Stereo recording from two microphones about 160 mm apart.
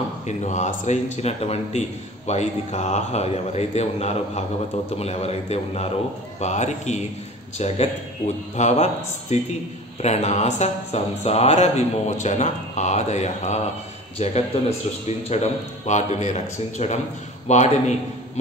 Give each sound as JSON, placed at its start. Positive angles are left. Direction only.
{"t": 0.3, "sound": "a man's voice", "side_deg": 45}